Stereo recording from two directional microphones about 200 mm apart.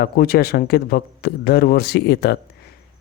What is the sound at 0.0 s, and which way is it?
Speech, 50° left (ahead or behind).